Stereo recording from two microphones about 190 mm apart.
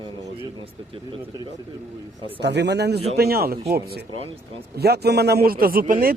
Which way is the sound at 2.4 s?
60° right (ahead or behind).